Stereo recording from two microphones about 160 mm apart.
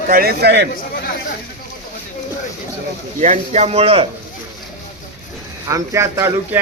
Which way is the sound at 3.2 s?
45° right (ahead or behind).